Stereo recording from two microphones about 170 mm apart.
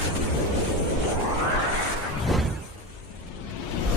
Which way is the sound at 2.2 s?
Centre (ahead or behind).